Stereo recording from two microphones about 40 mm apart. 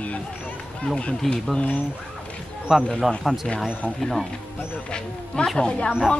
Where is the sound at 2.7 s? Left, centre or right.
Centre.